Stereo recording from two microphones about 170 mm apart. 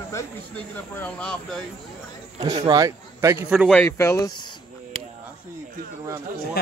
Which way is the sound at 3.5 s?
5° right (ahead or behind).